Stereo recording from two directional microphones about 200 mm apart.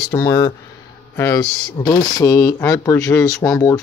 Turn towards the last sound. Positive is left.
turn(degrees=15)  # may be behind; listen again after turning